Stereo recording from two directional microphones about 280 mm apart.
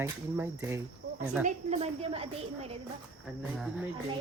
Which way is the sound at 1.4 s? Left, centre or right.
Right.